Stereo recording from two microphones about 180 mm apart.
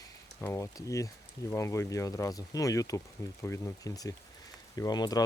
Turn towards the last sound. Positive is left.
turn(degrees=20)  # may be behind; listen again after turning